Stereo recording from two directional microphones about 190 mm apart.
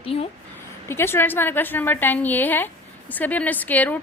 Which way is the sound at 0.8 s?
15° left (ahead or behind).